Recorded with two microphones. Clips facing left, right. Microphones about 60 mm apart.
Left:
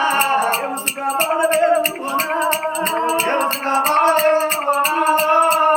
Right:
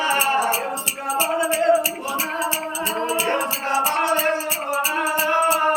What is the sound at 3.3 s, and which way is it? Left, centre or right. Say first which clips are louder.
Music: left 4 dB; left.